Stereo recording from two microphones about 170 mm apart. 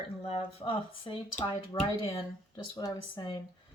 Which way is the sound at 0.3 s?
35° left (ahead or behind).